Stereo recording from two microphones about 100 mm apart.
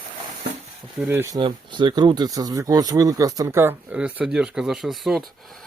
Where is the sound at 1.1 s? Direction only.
25° right (ahead or behind).